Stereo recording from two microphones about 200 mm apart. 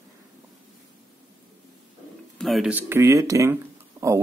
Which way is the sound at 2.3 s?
Centre (ahead or behind).